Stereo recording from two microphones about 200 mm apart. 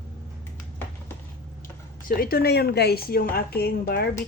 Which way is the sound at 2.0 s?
45° left (ahead or behind).